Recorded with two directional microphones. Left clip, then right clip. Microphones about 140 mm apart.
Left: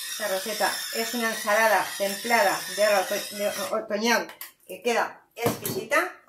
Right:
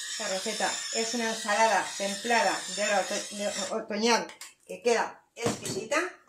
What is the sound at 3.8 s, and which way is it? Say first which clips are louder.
Speech: even; 25° right (ahead or behind).